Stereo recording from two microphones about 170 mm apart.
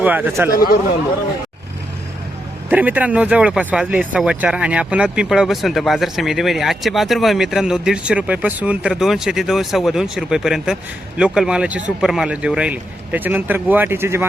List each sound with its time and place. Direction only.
0.0 s a man's voice: 10° right (ahead or behind)
0.5 s speech: 60° left (ahead or behind)
2.6 s a man's voice: 10° right (ahead or behind)